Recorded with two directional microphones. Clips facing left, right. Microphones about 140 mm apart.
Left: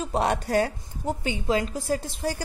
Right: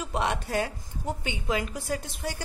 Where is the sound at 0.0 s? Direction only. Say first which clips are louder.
Left 4 dB; 35° left (ahead or behind).